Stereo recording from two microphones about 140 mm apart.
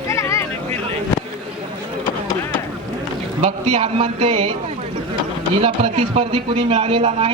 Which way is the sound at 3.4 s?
40° right (ahead or behind).